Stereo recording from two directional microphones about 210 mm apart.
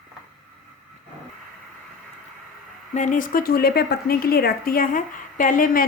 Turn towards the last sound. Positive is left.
turn(degrees=40)  # may be behind; listen again after turning